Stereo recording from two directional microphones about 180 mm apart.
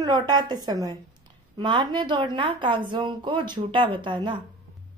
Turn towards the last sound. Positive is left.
turn(degrees=-25)  # may be behind; listen again after turning